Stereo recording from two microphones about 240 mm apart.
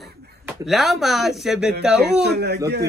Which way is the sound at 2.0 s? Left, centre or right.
Right.